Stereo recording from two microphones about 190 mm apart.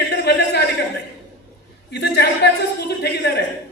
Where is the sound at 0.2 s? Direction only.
60° left (ahead or behind).